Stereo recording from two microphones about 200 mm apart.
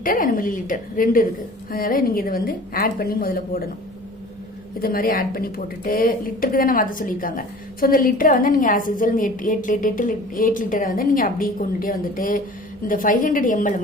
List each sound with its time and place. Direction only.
0.0 s a woman's voice: 45° left (ahead or behind)
4.8 s a woman's voice: 45° left (ahead or behind)